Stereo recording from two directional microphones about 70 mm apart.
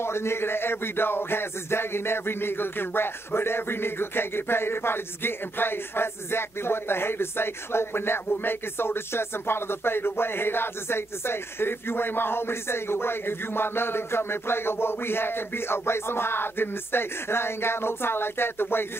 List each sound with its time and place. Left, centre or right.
0.0 s music: left